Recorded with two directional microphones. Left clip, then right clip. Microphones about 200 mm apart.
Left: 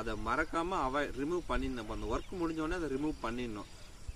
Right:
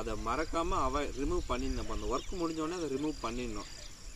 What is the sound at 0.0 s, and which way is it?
Speech, 10° left (ahead or behind).